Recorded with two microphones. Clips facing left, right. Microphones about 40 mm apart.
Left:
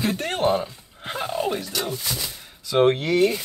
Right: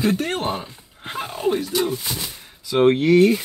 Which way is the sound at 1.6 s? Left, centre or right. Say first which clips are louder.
Right 5 dB; right.